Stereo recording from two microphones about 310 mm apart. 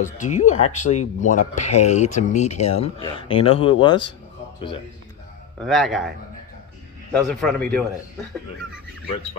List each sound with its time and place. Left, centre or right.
0.0 s speech: left
5.6 s a man's voice: centre